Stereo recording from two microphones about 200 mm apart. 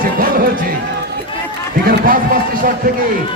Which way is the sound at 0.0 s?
45° right (ahead or behind).